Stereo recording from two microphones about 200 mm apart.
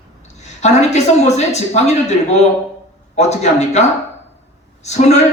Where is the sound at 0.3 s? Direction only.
35° left (ahead or behind).